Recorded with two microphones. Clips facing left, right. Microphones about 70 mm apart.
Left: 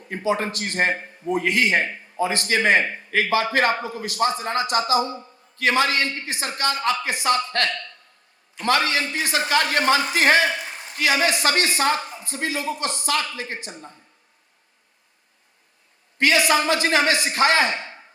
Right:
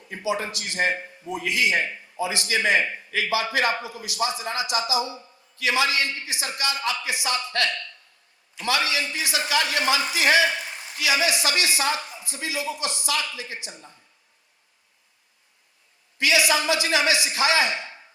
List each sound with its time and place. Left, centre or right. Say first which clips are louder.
0.1 s a man's voice: left 4 dB; left
16.1 s a man's voice: left 3 dB; left